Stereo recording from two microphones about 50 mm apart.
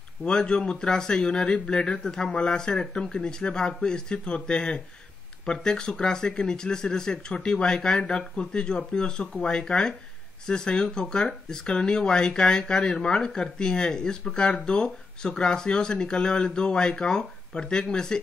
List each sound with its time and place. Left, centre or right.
0.2 s speech: centre